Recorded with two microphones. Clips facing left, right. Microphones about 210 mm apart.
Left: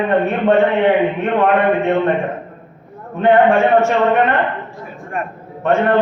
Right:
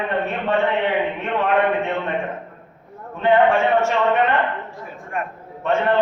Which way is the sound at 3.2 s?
55° left (ahead or behind).